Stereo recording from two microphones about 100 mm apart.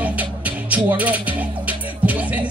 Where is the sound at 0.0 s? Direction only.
15° right (ahead or behind).